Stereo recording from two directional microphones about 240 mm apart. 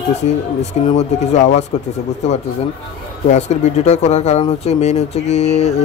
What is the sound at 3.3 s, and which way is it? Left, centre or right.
Speech, left.